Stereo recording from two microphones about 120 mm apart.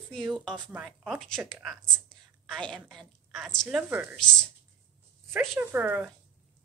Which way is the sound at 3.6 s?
10° right (ahead or behind).